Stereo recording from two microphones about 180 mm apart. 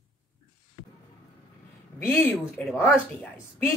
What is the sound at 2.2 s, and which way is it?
Speech, 10° left (ahead or behind).